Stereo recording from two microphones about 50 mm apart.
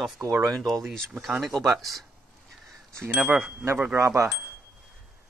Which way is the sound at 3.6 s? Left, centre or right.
Right.